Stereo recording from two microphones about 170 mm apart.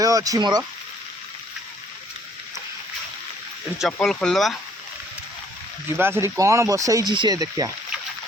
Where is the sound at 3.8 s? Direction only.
Centre (ahead or behind).